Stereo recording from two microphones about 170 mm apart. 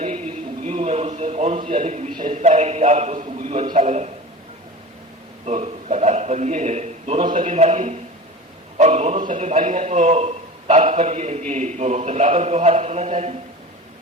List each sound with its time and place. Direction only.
0.6 s a sound: 35° right (ahead or behind)
2.2 s a man's voice: 40° right (ahead or behind)
5.5 s a man's voice: 40° right (ahead or behind)